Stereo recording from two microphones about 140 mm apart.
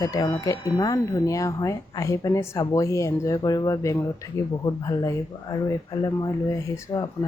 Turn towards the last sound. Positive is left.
turn(degrees=30)  # may be behind; listen again after turning